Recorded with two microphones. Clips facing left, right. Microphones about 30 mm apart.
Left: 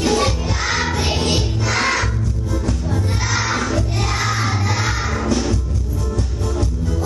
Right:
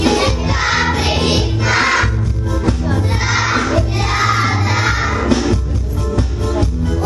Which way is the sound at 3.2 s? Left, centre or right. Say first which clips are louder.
Right 5 dB; right.